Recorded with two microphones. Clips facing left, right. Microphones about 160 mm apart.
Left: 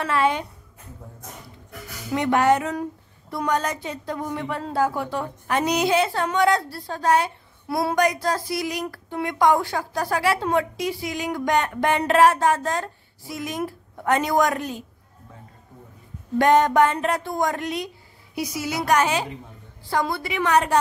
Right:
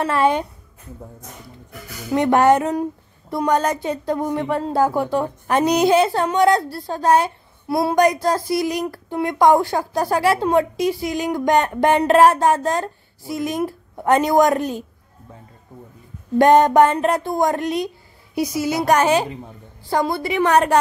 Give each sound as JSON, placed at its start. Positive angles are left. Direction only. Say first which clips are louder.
{"t": 0.0, "sound": "a woman's voice", "louder": "right 4 dB", "side_deg": -45}
{"t": 2.1, "sound": "a woman's voice", "louder": "right 5 dB", "side_deg": -45}
{"t": 7.6, "sound": "speech", "louder": "right 5 dB", "side_deg": -30}
{"t": 16.3, "sound": "a woman's voice", "louder": "right 5 dB", "side_deg": -40}